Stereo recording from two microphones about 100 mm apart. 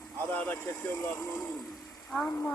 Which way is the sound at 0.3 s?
20° left (ahead or behind).